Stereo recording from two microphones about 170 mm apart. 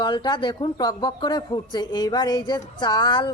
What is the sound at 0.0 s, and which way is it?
Speech, 25° left (ahead or behind).